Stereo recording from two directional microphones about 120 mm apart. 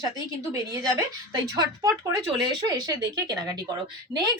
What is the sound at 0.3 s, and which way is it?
Speech, 30° right (ahead or behind).